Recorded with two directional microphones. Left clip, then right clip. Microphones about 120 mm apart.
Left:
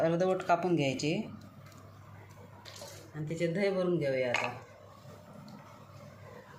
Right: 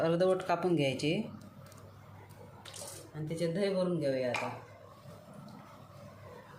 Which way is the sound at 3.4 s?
85° left.